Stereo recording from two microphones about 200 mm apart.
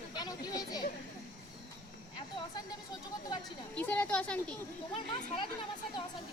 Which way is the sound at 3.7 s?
10° left (ahead or behind).